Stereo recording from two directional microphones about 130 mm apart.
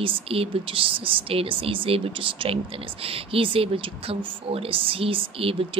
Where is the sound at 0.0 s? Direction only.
45° right (ahead or behind).